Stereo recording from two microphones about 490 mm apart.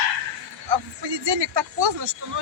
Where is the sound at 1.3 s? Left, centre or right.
Right.